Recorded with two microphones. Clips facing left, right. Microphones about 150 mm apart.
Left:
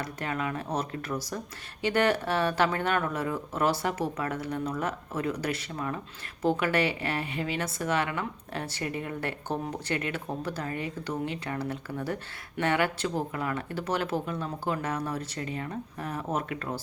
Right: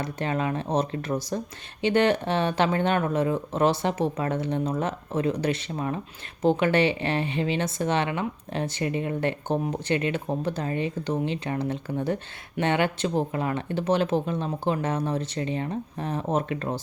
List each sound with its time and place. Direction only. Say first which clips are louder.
0.0 s speech: right 5 dB; 25° right (ahead or behind)